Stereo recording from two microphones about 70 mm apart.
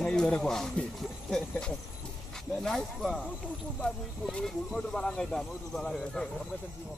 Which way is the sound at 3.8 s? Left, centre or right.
Centre.